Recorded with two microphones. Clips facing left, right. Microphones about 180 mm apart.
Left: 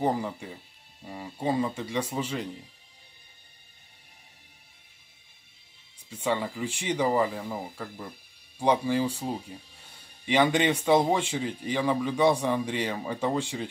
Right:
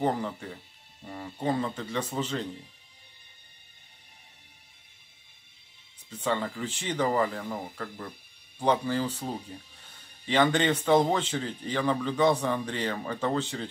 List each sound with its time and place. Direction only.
0.0 s speech: 10° left (ahead or behind)
6.0 s speech: 10° left (ahead or behind)